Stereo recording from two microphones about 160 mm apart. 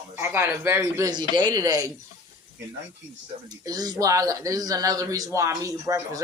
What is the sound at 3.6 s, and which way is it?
Speech, 25° right (ahead or behind).